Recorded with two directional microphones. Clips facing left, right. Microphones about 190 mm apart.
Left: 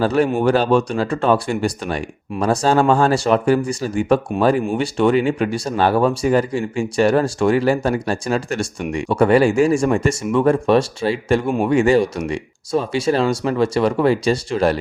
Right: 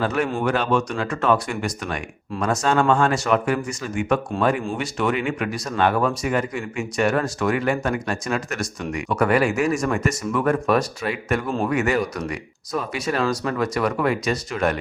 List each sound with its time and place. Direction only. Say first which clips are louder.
0.0 s speech: left 6 dB; 35° left (ahead or behind)